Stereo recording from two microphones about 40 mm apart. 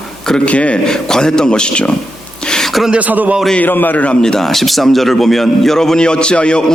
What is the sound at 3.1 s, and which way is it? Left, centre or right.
Speech, right.